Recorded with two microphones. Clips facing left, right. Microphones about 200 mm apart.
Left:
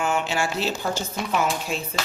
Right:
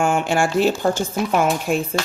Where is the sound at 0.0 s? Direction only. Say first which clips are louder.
Right 6 dB; 50° right (ahead or behind).